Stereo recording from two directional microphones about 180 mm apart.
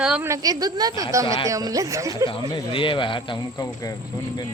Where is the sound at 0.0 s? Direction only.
5° right (ahead or behind).